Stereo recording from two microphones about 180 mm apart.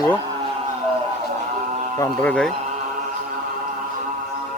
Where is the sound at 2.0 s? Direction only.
10° left (ahead or behind).